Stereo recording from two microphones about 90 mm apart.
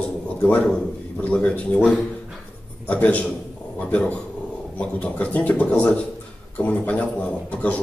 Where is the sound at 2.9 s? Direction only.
15° left (ahead or behind).